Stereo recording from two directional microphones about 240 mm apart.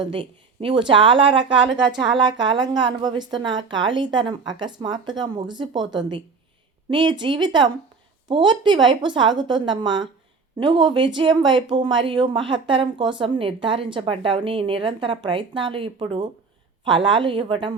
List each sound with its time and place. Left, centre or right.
0.0 s speech: right